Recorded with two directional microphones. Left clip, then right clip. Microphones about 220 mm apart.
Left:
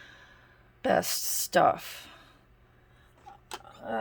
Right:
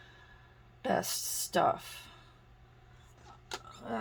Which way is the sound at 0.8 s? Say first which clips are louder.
Left 6 dB; 50° left (ahead or behind).